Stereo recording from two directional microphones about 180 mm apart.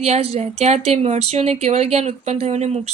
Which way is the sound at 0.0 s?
35° right (ahead or behind).